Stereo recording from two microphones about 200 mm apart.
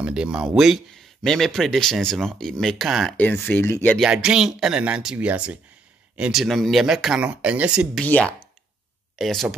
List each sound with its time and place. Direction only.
0.0 s speech: 5° right (ahead or behind)
8.0 s speech: 5° left (ahead or behind)